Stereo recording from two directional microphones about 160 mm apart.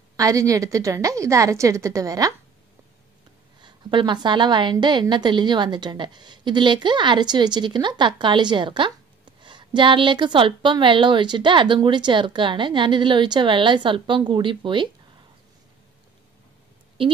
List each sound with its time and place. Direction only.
0.2 s a woman's voice: 20° right (ahead or behind)
3.6 s a woman's voice: 30° right (ahead or behind)